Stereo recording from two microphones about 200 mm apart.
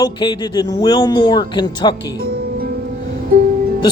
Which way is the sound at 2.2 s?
50° right (ahead or behind).